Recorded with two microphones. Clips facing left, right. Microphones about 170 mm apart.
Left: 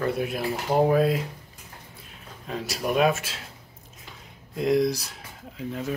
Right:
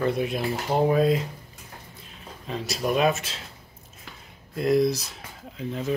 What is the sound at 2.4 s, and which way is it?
Speech, 10° left (ahead or behind).